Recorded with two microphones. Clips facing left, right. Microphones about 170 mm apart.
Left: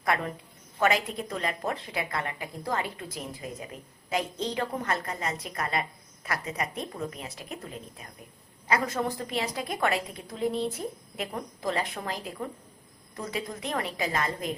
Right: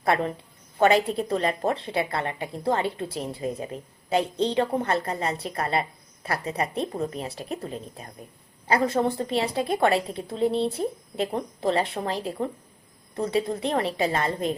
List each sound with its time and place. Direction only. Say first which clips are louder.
0.0 s a woman's voice: right 5 dB; 30° right (ahead or behind)